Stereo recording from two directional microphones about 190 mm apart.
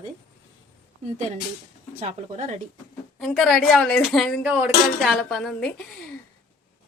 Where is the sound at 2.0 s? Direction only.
35° right (ahead or behind).